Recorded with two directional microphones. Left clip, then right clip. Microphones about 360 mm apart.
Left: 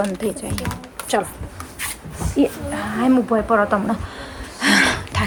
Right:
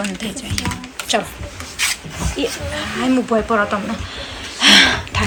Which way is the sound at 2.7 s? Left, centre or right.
Centre.